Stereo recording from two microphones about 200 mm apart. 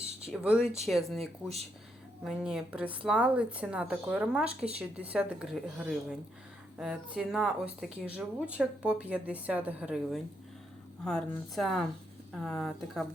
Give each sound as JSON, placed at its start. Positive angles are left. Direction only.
{"t": 0.3, "sound": "speech", "side_deg": -5}
{"t": 0.6, "sound": "speech", "side_deg": -30}
{"t": 0.9, "sound": "speech", "side_deg": 0}